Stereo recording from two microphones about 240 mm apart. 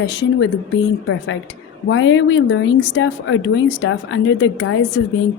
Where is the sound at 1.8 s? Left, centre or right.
Left.